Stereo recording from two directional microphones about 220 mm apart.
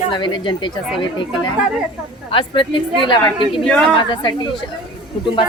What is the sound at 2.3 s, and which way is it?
Speech, 20° left (ahead or behind).